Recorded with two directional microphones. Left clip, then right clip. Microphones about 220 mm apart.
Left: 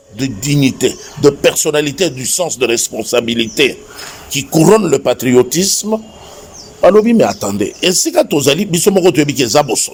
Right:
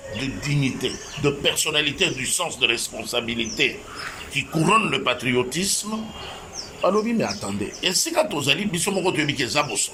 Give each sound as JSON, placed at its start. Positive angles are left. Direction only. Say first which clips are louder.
{"t": 0.2, "sound": "speech", "louder": "left 12 dB", "side_deg": 50}